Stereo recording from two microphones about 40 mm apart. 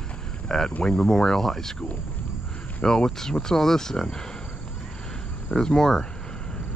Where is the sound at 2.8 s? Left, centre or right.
Centre.